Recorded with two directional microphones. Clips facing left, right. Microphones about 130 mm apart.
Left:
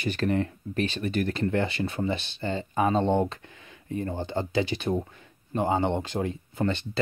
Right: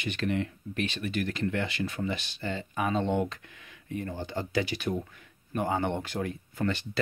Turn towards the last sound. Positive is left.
turn(degrees=25)  # may be behind; listen again after turning